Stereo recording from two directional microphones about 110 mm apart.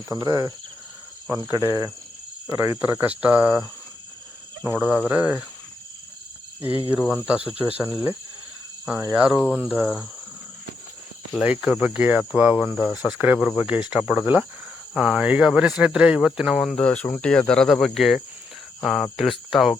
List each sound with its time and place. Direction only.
0.1 s cricket: 30° right (ahead or behind)
2.5 s speech: 25° right (ahead or behind)
4.8 s speech: 5° right (ahead or behind)
6.6 s speech: 55° left (ahead or behind)
7.2 s speech: 10° right (ahead or behind)
11.6 s speech: 5° right (ahead or behind)
16.8 s cricket: 10° left (ahead or behind)